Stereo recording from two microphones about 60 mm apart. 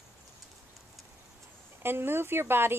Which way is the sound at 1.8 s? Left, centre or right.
Right.